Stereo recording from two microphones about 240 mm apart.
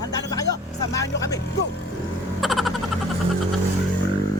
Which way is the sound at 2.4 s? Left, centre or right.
Centre.